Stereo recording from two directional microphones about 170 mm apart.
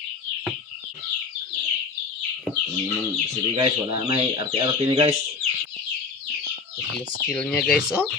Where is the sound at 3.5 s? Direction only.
30° right (ahead or behind).